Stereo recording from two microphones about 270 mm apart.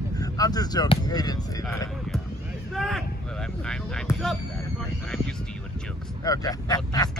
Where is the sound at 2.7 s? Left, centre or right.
Centre.